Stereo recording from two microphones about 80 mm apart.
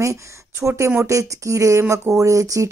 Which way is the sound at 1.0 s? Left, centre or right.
Right.